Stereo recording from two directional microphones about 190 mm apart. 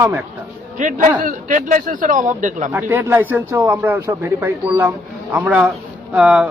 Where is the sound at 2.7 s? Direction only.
10° right (ahead or behind).